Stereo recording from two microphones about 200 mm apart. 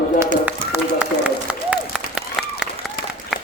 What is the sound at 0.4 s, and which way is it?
Run, 5° right (ahead or behind).